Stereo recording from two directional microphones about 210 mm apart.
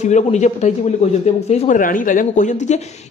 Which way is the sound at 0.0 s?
35° left (ahead or behind).